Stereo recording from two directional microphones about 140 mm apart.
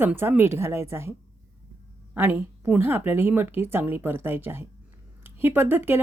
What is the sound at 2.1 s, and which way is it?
Speech, 15° right (ahead or behind).